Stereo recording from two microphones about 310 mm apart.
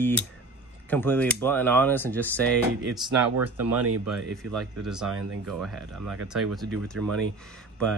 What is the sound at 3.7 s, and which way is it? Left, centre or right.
Speech, right.